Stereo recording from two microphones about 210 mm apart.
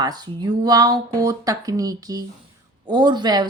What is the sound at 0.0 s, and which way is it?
A woman's voice, 20° right (ahead or behind).